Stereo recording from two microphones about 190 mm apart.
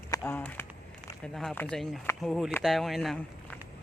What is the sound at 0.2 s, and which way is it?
A man's voice, 10° left (ahead or behind).